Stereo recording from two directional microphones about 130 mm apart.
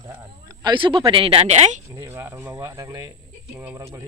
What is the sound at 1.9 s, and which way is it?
Speech, 20° right (ahead or behind).